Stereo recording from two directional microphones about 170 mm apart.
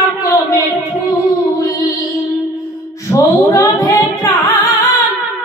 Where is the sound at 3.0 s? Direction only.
15° left (ahead or behind).